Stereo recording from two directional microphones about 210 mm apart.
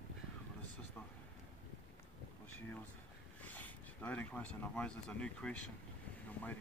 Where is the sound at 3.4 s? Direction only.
10° left (ahead or behind).